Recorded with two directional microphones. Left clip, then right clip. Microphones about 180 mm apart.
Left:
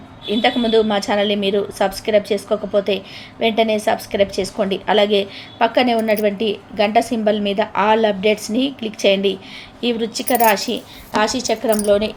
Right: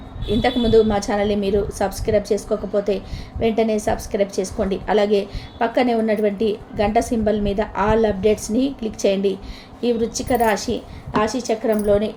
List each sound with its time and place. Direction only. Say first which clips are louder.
0.3 s a woman's voice: left 2 dB; 10° left (ahead or behind)